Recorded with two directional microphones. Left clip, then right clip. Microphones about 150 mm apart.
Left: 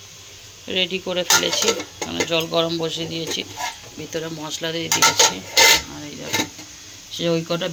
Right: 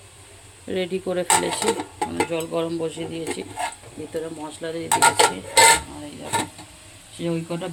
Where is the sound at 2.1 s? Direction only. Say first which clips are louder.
Left 6 dB; 10° right (ahead or behind).